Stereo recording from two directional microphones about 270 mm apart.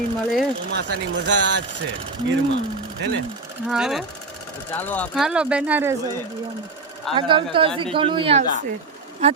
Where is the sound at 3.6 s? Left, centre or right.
Centre.